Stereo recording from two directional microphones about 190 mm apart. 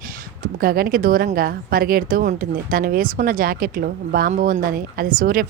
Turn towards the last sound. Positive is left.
turn(degrees=-50)  # may be behind; listen again after turning